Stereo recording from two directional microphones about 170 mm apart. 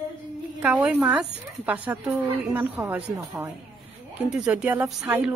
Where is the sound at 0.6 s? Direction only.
10° right (ahead or behind).